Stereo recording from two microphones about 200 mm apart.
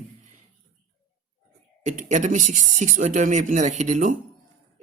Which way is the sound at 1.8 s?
40° right (ahead or behind).